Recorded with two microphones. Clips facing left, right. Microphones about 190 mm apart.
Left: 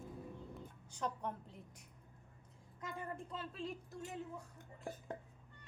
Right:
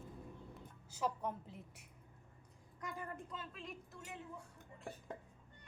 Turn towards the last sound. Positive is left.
turn(degrees=30)  # may be behind; listen again after turning